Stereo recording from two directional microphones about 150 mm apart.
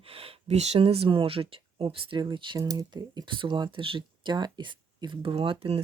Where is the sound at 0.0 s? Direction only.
40° right (ahead or behind).